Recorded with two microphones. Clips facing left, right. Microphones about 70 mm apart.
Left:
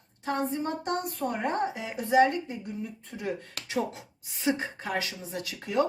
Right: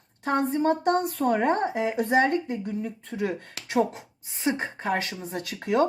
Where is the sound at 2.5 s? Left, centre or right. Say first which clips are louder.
Right 6 dB; right.